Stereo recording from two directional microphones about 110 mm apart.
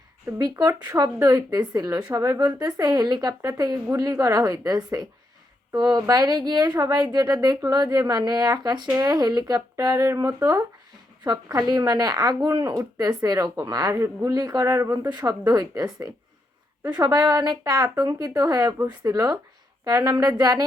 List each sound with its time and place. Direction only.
0.3 s a woman's voice: 30° right (ahead or behind)